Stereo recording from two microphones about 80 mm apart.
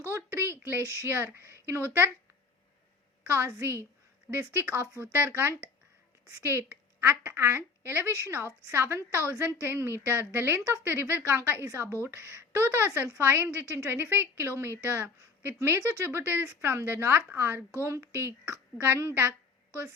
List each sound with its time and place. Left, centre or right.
0.1 s a woman's voice: right
3.2 s a woman's voice: right